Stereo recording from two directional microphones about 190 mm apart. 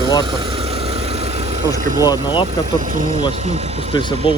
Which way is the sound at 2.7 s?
45° right (ahead or behind).